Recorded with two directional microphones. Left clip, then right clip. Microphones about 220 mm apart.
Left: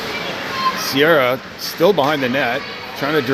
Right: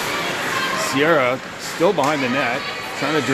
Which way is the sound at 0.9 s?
25° left (ahead or behind).